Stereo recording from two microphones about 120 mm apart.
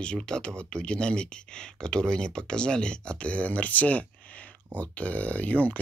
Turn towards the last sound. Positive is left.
turn(degrees=10)  # may be behind; listen again after turning